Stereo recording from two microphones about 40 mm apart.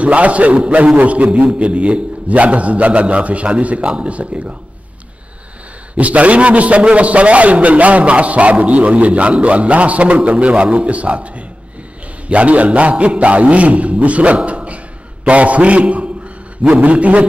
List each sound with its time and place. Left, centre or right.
0.0 s a man's voice: right
5.9 s a man's voice: right